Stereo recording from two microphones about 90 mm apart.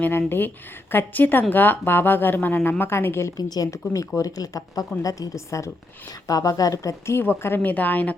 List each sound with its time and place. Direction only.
0.0 s speech: 25° left (ahead or behind)
3.3 s speech: 45° left (ahead or behind); by 8.1 s 20° left (ahead or behind)